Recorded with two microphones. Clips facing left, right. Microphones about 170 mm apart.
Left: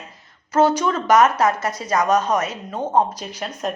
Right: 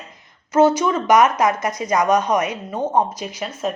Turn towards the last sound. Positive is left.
turn(degrees=-5)  # may be behind; listen again after turning